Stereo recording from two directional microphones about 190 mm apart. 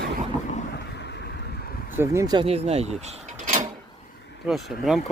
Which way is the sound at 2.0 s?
15° right (ahead or behind).